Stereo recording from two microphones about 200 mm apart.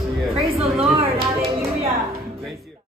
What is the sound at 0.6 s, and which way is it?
Speech, 30° right (ahead or behind).